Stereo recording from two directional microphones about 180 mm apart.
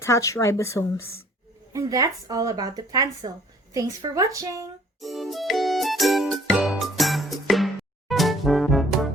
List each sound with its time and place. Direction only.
0.0 s speech: 15° left (ahead or behind)
1.7 s speech: 20° right (ahead or behind)
4.9 s music: centre (ahead or behind)